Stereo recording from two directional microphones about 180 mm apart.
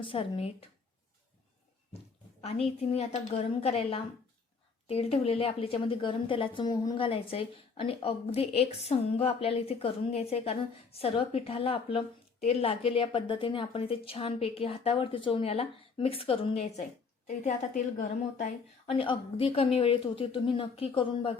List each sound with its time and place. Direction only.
0.0 s speech: 30° left (ahead or behind)
2.4 s a woman's voice: 35° left (ahead or behind)
18.9 s a woman's voice: 30° left (ahead or behind)